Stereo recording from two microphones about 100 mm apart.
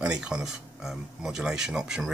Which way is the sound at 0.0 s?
10° right (ahead or behind).